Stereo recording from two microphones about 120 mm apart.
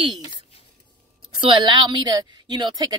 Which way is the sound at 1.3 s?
45° right (ahead or behind).